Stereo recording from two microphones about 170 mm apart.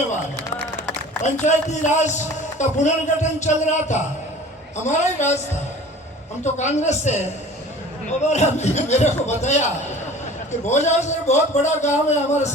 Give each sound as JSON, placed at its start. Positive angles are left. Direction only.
{"t": 1.2, "sound": "a man's voice", "side_deg": 45}
{"t": 6.4, "sound": "a man's voice", "side_deg": 45}
{"t": 8.3, "sound": "a man's voice", "side_deg": 40}
{"t": 10.7, "sound": "a man's voice", "side_deg": 45}